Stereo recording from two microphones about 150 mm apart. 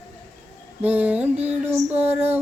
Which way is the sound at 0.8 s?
10° right (ahead or behind).